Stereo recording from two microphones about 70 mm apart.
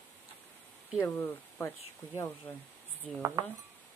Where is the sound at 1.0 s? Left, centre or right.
Left.